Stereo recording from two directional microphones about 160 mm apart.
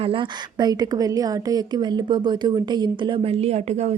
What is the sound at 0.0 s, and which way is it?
A woman's voice, 30° right (ahead or behind).